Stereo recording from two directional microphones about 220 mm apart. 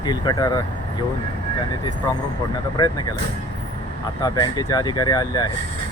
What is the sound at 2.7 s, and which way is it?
Speech, 20° left (ahead or behind).